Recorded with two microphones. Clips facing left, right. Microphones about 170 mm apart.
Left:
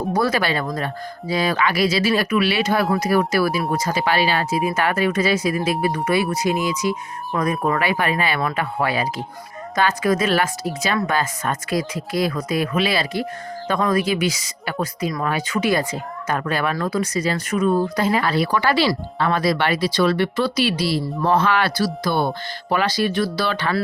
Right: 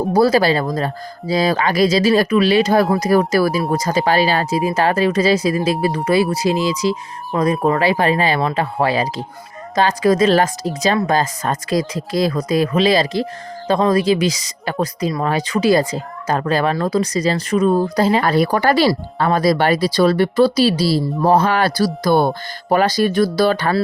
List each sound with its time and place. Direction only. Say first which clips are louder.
0.1 s speech: right 7 dB; 35° right (ahead or behind)